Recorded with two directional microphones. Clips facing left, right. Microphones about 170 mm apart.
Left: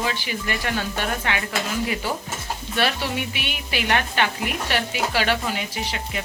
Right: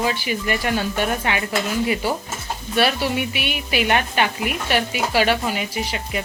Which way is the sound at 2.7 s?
10° right (ahead or behind).